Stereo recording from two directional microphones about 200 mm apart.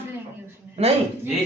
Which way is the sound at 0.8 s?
30° right (ahead or behind).